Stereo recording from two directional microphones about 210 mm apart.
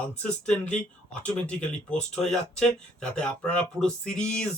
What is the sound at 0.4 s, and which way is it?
Speech, 5° left (ahead or behind).